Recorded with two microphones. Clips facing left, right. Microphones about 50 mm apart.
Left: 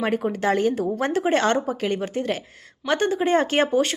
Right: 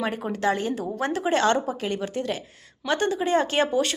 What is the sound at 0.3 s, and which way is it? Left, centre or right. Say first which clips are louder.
Speech: left 1 dB; left.